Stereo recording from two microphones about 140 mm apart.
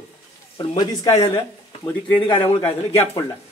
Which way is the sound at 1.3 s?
10° left (ahead or behind).